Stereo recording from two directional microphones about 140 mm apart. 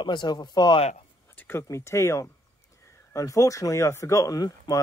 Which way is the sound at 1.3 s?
15° left (ahead or behind).